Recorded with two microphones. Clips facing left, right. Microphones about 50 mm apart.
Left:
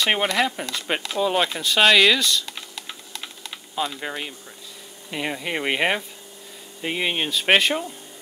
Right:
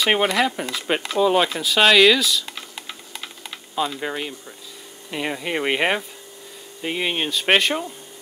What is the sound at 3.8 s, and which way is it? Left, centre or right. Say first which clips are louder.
Speech: right 3 dB; centre.